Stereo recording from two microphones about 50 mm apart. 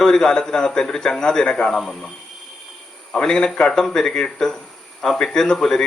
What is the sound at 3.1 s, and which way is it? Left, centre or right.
Speech, centre.